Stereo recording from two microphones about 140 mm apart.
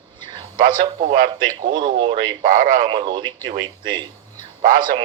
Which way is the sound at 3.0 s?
35° right (ahead or behind).